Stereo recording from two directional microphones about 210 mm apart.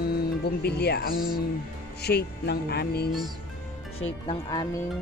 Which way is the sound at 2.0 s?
50° left (ahead or behind).